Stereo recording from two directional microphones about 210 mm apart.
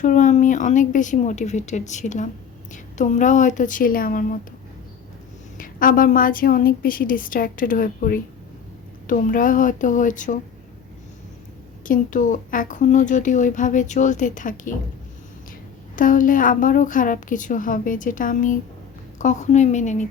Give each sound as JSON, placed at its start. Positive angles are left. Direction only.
{"t": 0.0, "sound": "a woman's voice", "side_deg": 35}
{"t": 5.5, "sound": "a woman's voice", "side_deg": 40}
{"t": 11.9, "sound": "a woman's voice", "side_deg": 40}
{"t": 16.0, "sound": "a woman's voice", "side_deg": 40}